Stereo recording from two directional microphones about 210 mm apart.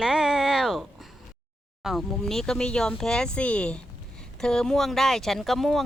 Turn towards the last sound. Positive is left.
turn(degrees=0)  # may be behind; listen again after turning